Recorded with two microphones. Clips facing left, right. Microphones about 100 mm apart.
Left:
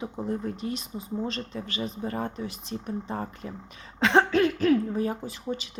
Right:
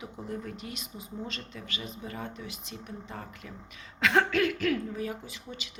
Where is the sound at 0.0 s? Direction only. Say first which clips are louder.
Left 7 dB; 30° left (ahead or behind).